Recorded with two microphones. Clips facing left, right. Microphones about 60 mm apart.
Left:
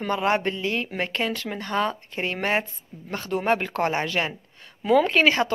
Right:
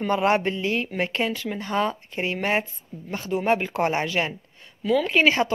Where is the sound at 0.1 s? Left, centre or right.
Right.